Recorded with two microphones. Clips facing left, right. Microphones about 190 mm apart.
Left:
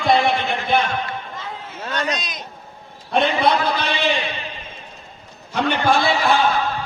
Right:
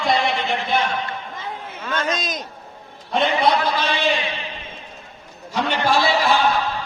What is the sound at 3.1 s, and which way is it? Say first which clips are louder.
Speech: left 1 dB; 60° left (ahead or behind).